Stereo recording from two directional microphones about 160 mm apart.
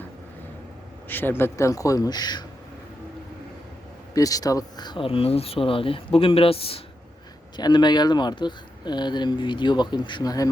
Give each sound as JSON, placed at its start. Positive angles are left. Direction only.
{"t": 1.0, "sound": "speech", "side_deg": 10}
{"t": 4.1, "sound": "speech", "side_deg": 20}